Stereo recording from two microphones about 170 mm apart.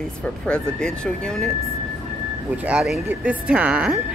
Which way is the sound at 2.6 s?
5° right (ahead or behind).